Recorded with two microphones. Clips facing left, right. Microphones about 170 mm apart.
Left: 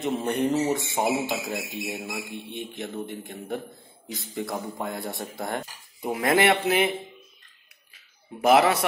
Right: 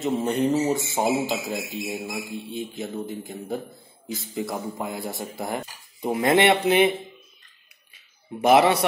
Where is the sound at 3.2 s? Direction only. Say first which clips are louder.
Right 2 dB; 5° right (ahead or behind).